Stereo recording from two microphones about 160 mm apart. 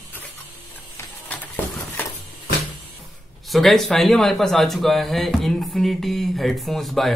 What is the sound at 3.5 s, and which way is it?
Speech, centre (ahead or behind).